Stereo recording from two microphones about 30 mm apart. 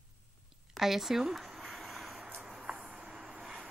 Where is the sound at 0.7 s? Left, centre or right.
Centre.